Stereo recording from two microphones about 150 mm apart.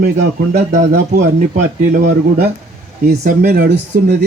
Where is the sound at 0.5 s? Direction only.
65° right (ahead or behind); by 4.1 s 90° right.